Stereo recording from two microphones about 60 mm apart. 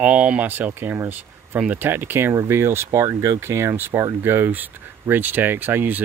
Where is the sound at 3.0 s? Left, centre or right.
Right.